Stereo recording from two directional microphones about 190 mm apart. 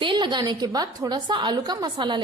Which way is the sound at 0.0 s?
25° right (ahead or behind).